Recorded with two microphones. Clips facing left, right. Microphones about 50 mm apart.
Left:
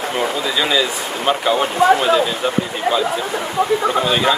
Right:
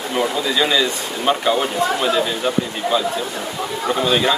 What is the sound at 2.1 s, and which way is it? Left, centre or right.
Speech, centre.